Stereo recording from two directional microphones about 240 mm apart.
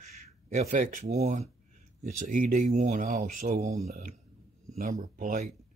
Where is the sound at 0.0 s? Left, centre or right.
Right.